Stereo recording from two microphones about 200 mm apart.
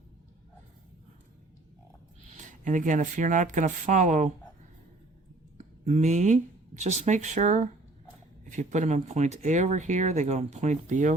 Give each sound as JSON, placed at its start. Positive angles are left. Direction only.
{"t": 2.3, "sound": "speech", "side_deg": -40}
{"t": 5.5, "sound": "speech", "side_deg": -35}